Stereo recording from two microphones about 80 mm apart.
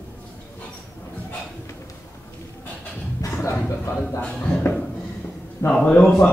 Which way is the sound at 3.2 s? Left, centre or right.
Left.